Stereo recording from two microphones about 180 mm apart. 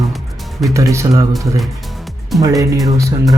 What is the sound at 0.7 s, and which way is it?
Speech, 15° right (ahead or behind).